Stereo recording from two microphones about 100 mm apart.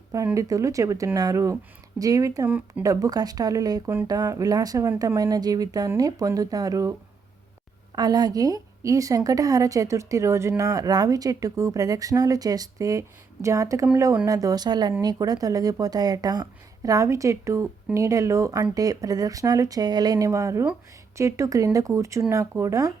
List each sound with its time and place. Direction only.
0.3 s speech: 35° right (ahead or behind)
2.5 s speech: 15° right (ahead or behind)
2.8 s speech: 35° right (ahead or behind)
7.9 s speech: 40° right (ahead or behind)
14.3 s speech: 35° right (ahead or behind)